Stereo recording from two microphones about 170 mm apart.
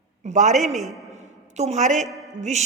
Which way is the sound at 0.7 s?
Centre (ahead or behind).